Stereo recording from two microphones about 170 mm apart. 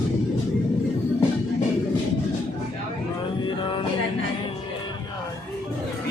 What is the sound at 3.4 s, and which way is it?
Music, 30° left (ahead or behind).